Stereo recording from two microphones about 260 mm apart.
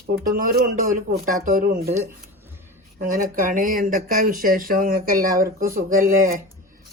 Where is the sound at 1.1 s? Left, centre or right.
Right.